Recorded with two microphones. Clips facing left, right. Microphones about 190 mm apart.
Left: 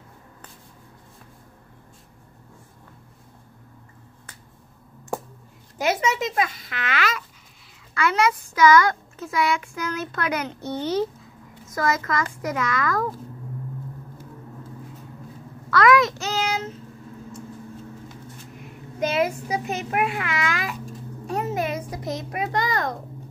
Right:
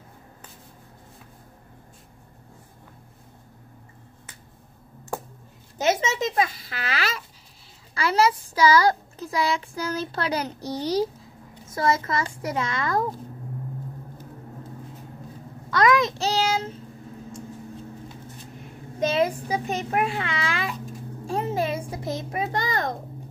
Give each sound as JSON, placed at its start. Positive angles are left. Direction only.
{"t": 5.8, "sound": "a child's voice", "side_deg": -25}
{"t": 15.7, "sound": "child singing", "side_deg": -25}
{"t": 18.9, "sound": "a child's voice", "side_deg": -25}